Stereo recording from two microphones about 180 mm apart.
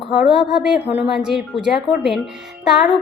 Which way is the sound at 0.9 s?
5° right (ahead or behind).